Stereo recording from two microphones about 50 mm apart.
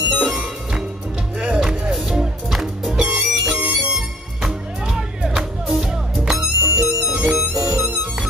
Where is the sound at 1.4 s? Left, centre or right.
Centre.